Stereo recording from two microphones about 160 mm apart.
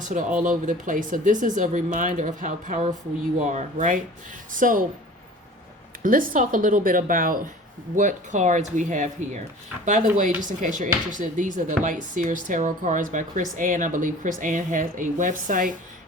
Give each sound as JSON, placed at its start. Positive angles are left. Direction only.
{"t": 0.1, "sound": "a woman's voice", "side_deg": -55}
{"t": 6.0, "sound": "a woman's voice", "side_deg": -55}